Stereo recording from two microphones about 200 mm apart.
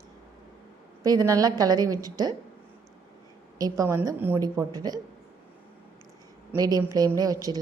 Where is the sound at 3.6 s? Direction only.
15° right (ahead or behind).